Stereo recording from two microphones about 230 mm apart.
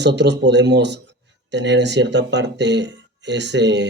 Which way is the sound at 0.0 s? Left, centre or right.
Right.